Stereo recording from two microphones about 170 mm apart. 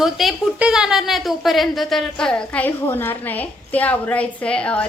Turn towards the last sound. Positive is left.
turn(degrees=5)  # may be behind; listen again after turning